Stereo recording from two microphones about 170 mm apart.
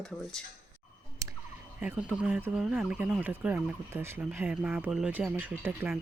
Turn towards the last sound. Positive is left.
turn(degrees=-10)  # may be behind; listen again after turning